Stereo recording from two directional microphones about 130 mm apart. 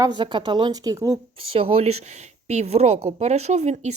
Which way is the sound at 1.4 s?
45° right (ahead or behind).